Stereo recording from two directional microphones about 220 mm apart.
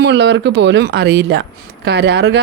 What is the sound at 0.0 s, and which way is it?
Speech, 50° right (ahead or behind).